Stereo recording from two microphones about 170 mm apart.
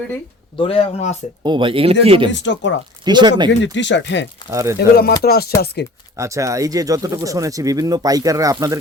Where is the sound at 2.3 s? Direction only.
90° left.